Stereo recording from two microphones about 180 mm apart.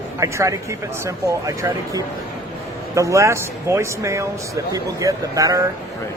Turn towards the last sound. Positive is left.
turn(degrees=-20)  # may be behind; listen again after turning